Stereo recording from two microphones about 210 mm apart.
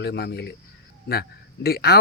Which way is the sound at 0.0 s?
50° left (ahead or behind).